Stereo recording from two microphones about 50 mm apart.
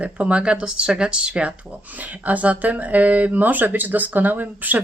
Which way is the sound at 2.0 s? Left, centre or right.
Right.